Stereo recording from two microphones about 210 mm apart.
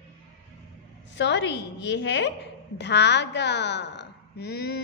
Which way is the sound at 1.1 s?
55° left (ahead or behind).